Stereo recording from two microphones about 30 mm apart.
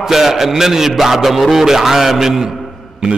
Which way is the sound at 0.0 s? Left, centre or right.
Centre.